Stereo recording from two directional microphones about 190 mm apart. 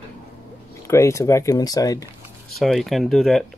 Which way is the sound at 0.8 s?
15° left (ahead or behind).